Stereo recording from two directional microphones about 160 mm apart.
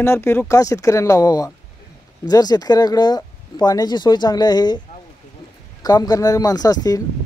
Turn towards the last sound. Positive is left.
turn(degrees=25)  # may be behind; listen again after turning